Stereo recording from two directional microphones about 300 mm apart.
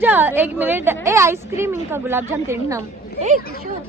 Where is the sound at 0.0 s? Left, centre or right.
Centre.